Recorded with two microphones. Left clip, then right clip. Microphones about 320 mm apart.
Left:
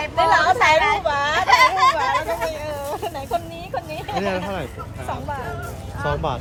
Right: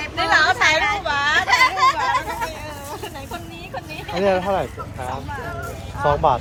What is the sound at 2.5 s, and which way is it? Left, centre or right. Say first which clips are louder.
Vehicle: left 5 dB; left.